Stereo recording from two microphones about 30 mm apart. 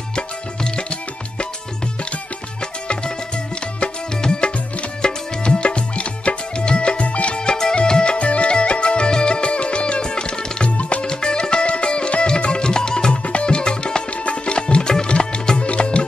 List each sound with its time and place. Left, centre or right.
0.1 s music: left
4.2 s music: left
7.3 s music: left
10.8 s music: left
11.1 s music: left
13.1 s music: left
14.1 s music: left